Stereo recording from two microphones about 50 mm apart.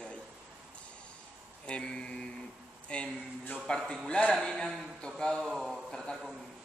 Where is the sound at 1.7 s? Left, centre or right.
Centre.